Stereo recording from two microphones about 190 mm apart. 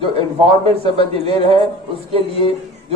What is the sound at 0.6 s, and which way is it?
Speech, 30° right (ahead or behind).